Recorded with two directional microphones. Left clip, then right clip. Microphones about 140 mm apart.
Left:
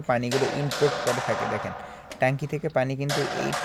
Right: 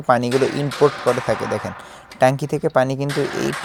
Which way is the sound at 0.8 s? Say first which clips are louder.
Right 8 dB; 45° right (ahead or behind).